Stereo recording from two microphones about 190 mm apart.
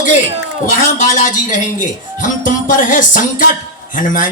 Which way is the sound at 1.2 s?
40° left (ahead or behind).